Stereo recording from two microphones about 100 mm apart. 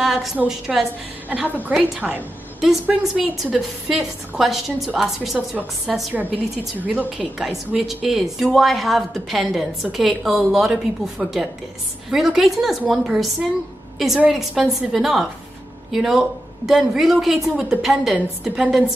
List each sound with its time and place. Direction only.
0.0 s a woman's voice: 5° right (ahead or behind)
1.3 s a woman's voice: 15° right (ahead or behind)
3.9 s a woman's voice: 5° right (ahead or behind)
7.3 s a woman's voice: centre (ahead or behind)